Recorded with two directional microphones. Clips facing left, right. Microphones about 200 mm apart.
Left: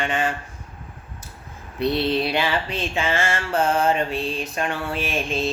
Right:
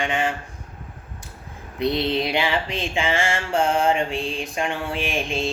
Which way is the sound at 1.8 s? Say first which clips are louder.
Left 1 dB; 15° right (ahead or behind).